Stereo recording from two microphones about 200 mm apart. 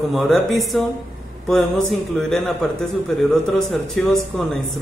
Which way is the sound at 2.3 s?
Centre (ahead or behind).